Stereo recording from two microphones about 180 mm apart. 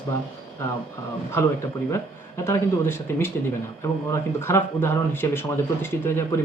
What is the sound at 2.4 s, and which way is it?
Speech, 15° left (ahead or behind).